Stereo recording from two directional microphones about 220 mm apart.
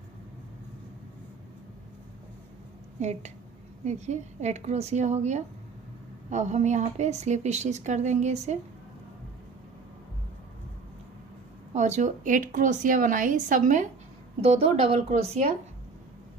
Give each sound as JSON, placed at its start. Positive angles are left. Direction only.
{"t": 3.0, "sound": "speech", "side_deg": -30}
{"t": 11.7, "sound": "speech", "side_deg": -30}